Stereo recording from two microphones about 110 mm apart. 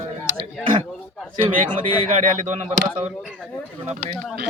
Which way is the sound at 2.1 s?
90° right.